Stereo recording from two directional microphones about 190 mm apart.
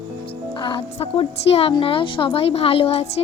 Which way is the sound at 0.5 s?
25° left (ahead or behind).